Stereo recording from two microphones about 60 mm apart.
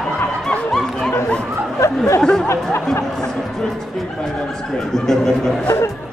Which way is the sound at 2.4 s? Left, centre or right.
Left.